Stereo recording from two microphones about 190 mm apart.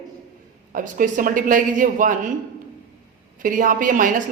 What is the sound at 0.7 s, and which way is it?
A woman's voice, 45° right (ahead or behind).